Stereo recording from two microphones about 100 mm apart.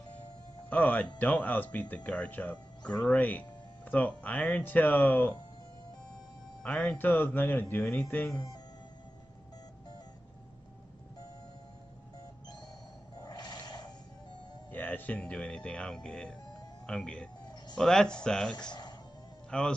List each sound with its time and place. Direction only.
0.7 s speech: 15° left (ahead or behind)
6.6 s speech: 15° left (ahead or behind)
13.2 s a sound: 45° left (ahead or behind)
14.7 s speech: 15° left (ahead or behind)
18.7 s music: 45° left (ahead or behind)
19.5 s speech: 10° left (ahead or behind)